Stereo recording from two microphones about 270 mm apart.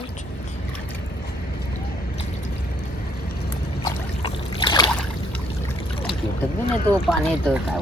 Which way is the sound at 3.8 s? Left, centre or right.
Centre.